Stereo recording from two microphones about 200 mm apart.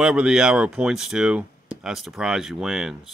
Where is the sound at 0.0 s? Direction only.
5° right (ahead or behind).